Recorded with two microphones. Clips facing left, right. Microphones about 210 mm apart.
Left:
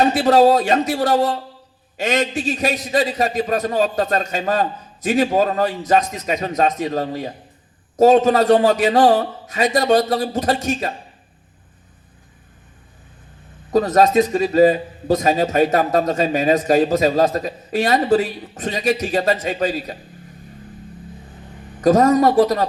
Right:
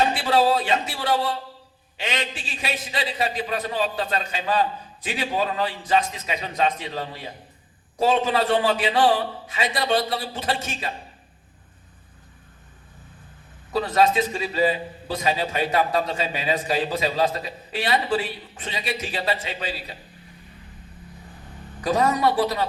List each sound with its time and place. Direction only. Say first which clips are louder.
0.0 s a man's voice: left 7 dB; 45° left (ahead or behind)
13.7 s a man's voice: left 6 dB; 45° left (ahead or behind)
21.8 s a man's voice: left 8 dB; 45° left (ahead or behind)